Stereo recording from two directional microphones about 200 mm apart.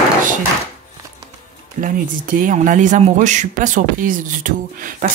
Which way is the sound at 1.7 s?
45° right (ahead or behind).